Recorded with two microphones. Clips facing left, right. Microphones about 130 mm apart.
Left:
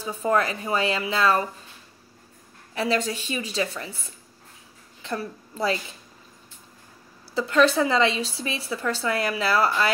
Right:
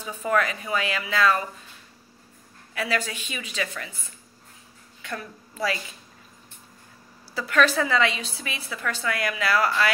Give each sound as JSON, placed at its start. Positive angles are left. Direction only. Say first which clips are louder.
{"t": 0.0, "sound": "a woman's voice", "louder": "left 1 dB", "side_deg": 30}
{"t": 2.7, "sound": "a woman's voice", "louder": "left 3 dB", "side_deg": 30}
{"t": 7.3, "sound": "a woman's voice", "louder": "left 3 dB", "side_deg": 30}